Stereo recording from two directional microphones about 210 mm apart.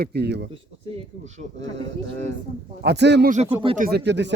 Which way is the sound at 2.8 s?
55° right (ahead or behind).